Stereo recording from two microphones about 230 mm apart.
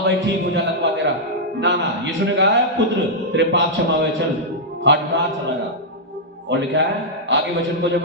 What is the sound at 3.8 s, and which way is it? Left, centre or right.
Speech, right.